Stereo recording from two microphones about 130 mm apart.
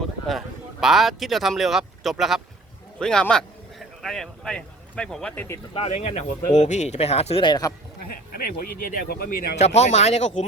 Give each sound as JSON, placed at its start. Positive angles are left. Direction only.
{"t": 0.3, "sound": "speech", "side_deg": 0}
{"t": 5.3, "sound": "speech", "side_deg": 15}
{"t": 5.7, "sound": "speech", "side_deg": 55}
{"t": 7.4, "sound": "speech", "side_deg": 30}
{"t": 8.4, "sound": "speech", "side_deg": 90}
{"t": 9.6, "sound": "speech", "side_deg": 60}